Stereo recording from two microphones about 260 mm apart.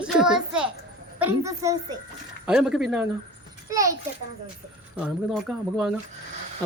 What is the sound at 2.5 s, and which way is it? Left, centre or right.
A child's voice, centre.